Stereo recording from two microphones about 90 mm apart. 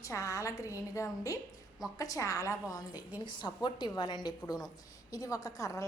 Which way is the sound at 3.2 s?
60° left (ahead or behind).